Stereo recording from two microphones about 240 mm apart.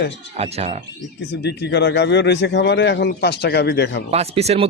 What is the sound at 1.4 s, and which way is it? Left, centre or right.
Speech, left.